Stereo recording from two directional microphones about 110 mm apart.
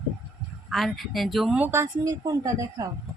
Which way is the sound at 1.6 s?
20° right (ahead or behind).